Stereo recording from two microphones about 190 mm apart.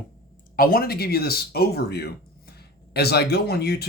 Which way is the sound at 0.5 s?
50° left (ahead or behind).